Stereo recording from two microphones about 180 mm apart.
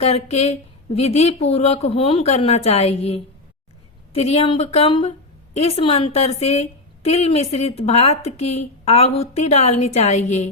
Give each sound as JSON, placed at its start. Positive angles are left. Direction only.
{"t": 0.0, "sound": "a woman's voice", "side_deg": 35}